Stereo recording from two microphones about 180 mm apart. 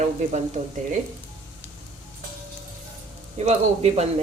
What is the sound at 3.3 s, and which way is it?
Speech, 35° right (ahead or behind).